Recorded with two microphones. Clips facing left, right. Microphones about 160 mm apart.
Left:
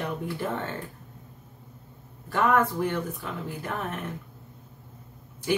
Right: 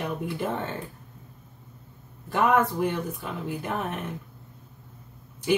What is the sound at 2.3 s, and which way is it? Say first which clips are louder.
Speech: right 1 dB; 15° right (ahead or behind).